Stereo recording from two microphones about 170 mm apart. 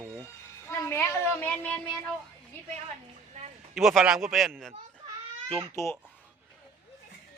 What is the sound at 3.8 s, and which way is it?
Speech, centre (ahead or behind).